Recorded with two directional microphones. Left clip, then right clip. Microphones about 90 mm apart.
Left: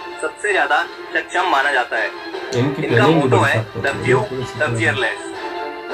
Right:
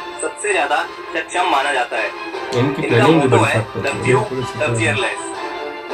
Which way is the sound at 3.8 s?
30° right (ahead or behind).